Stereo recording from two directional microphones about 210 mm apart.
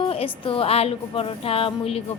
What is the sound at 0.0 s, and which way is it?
A woman's voice, 25° left (ahead or behind).